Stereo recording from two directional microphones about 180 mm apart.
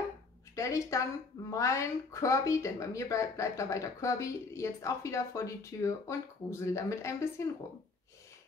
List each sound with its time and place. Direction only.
0.6 s a woman's voice: 15° left (ahead or behind)